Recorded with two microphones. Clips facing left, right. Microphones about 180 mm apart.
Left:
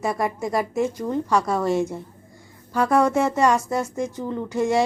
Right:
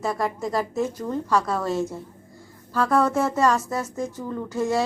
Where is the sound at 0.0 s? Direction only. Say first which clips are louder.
Left 1 dB; 15° left (ahead or behind).